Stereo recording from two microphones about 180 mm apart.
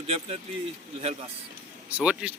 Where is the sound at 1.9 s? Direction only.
5° right (ahead or behind).